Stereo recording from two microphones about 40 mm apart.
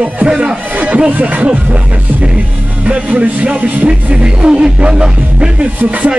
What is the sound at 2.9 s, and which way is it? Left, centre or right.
Music, right.